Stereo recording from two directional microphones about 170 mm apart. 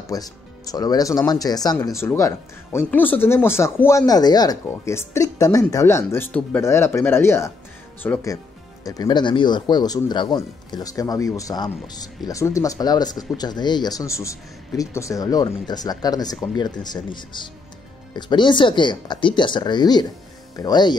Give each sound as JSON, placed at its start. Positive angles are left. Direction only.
{"t": 0.0, "sound": "a man's voice", "side_deg": 20}